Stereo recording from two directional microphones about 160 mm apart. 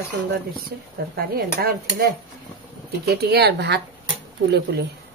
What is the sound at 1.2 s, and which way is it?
Speech, 70° right (ahead or behind).